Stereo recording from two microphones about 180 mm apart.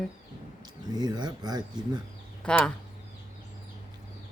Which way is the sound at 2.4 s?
5° left (ahead or behind).